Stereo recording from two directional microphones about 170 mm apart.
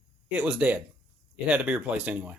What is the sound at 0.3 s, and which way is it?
Speech, 10° right (ahead or behind).